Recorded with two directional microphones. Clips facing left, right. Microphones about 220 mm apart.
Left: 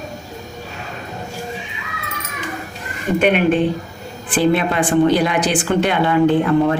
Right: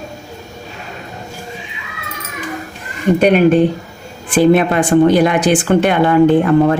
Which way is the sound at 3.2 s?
40° right (ahead or behind).